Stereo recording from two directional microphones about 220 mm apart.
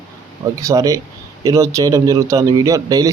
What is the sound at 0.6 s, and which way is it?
A man's voice, 15° right (ahead or behind).